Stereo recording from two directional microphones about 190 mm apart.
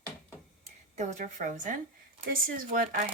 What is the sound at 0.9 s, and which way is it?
A woman's voice, 40° right (ahead or behind).